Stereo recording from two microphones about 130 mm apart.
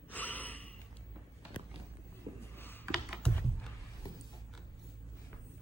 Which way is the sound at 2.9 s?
Centre (ahead or behind).